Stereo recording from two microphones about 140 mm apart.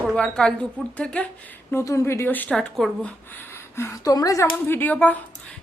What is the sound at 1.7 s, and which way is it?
A woman's voice, 20° left (ahead or behind).